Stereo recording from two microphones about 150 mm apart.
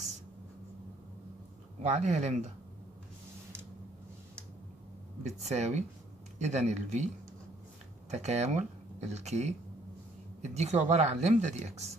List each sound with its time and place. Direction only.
1.8 s speech: 50° right (ahead or behind)
5.2 s speech: 50° right (ahead or behind)
8.1 s speech: 45° right (ahead or behind)